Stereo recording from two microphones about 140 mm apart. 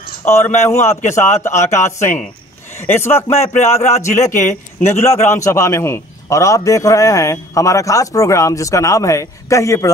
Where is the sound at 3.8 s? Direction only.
50° left (ahead or behind).